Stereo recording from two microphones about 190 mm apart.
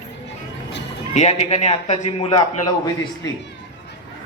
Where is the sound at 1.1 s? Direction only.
35° left (ahead or behind).